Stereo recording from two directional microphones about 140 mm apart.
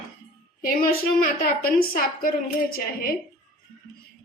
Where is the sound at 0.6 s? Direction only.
90° left.